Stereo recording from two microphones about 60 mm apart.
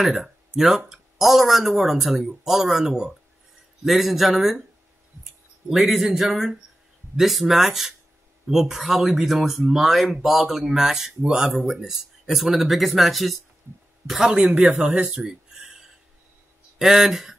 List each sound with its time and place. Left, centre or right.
0.0 s speech: centre
5.7 s speech: centre
14.5 s speech: centre
15.0 s a sound: centre
16.7 s speech: centre